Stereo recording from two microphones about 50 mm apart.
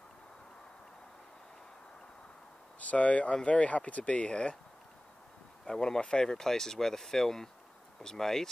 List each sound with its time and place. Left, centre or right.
2.9 s speech: left
5.7 s speech: centre